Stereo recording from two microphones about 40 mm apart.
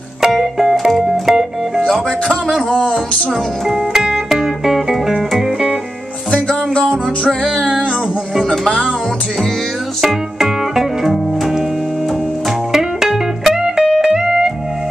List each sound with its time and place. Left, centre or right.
0.2 s music: centre
3.6 s music: centre
6.3 s music: left
6.8 s music: centre
10.0 s music: centre
12.7 s music: centre